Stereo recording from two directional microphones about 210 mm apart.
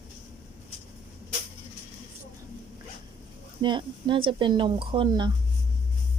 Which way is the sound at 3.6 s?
20° right (ahead or behind).